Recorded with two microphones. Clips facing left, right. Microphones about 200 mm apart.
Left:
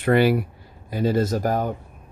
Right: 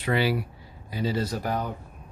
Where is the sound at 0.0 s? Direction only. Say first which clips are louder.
Left 7 dB; 50° left (ahead or behind).